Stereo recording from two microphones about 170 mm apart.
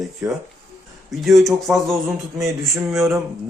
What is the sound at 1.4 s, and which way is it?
Speech, centre (ahead or behind).